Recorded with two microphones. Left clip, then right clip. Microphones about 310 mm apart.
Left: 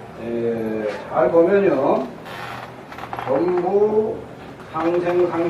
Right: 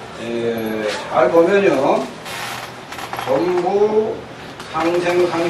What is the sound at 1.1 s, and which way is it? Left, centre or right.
Speech, centre.